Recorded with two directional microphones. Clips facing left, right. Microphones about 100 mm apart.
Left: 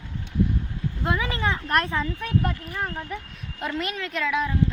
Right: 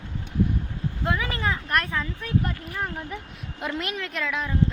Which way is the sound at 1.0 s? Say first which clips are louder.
Left 1 dB; 20° left (ahead or behind).